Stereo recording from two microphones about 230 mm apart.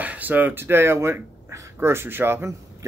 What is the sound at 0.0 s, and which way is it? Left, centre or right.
Speech, centre.